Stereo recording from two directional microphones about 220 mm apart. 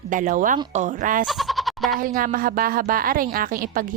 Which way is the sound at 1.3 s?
Centre (ahead or behind).